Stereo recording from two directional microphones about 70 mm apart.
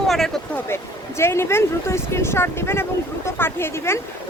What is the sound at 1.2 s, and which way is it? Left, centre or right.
Speech, left.